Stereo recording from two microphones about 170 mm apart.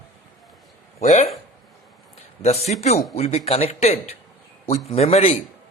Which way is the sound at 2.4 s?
40° left (ahead or behind).